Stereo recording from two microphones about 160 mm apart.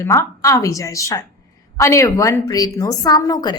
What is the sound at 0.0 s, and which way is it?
A woman's voice, 20° left (ahead or behind).